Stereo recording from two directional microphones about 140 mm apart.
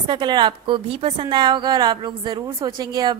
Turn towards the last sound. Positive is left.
turn(degrees=-30)  # may be behind; listen again after turning